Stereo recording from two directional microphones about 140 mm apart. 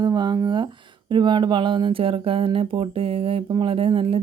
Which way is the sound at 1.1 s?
35° right (ahead or behind).